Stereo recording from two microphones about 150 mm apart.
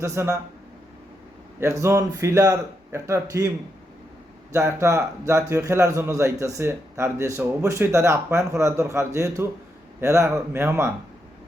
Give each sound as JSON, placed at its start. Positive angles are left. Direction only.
{"t": 0.0, "sound": "a man's voice", "side_deg": -20}
{"t": 1.5, "sound": "a man's voice", "side_deg": -20}
{"t": 4.5, "sound": "a man's voice", "side_deg": -20}